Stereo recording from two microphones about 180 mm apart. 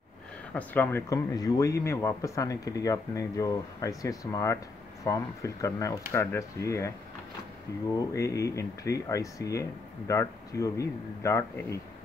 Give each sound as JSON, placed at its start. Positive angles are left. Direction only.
{"t": 0.6, "sound": "speech", "side_deg": 10}
{"t": 8.1, "sound": "speech", "side_deg": 15}